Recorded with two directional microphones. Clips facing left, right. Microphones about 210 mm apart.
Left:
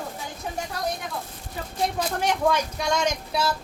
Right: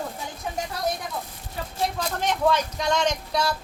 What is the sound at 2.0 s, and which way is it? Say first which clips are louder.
Speech: left 1 dB; 10° left (ahead or behind).